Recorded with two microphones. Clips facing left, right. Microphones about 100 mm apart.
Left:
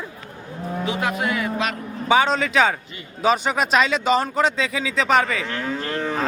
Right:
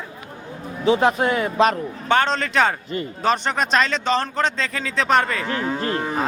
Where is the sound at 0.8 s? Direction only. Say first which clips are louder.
Right 7 dB; 30° right (ahead or behind).